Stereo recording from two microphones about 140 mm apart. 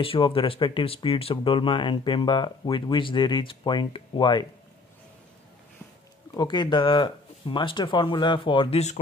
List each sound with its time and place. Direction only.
0.0 s speech: 40° left (ahead or behind)
6.3 s speech: 30° left (ahead or behind); by 9.0 s 50° left (ahead or behind)